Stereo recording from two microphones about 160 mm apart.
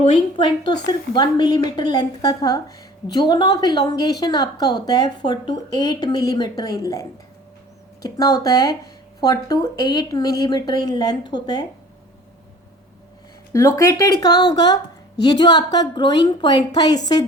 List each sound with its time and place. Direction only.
0.1 s a woman's voice: 30° left (ahead or behind)
13.5 s a woman's voice: 20° left (ahead or behind)